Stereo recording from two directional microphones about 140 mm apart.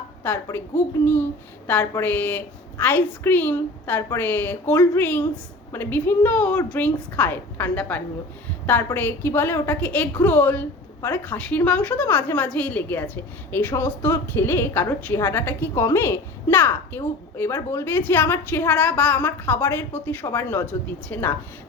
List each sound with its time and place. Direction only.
0.2 s a woman's voice: 15° left (ahead or behind)